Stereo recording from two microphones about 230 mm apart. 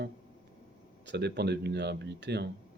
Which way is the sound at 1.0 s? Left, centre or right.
Right.